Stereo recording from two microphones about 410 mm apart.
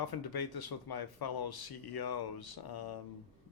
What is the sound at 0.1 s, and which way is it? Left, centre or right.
Speech, left.